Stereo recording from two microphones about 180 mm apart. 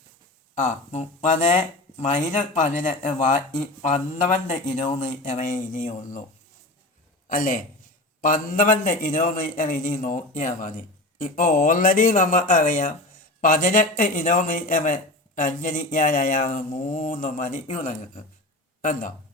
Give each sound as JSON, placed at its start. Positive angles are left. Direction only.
{"t": 0.6, "sound": "speech", "side_deg": 40}
{"t": 7.3, "sound": "a man's voice", "side_deg": 50}